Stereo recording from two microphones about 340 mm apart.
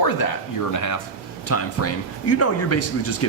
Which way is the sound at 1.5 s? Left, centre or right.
Left.